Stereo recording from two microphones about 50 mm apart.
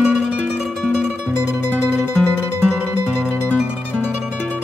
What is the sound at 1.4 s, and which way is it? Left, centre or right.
Music, centre.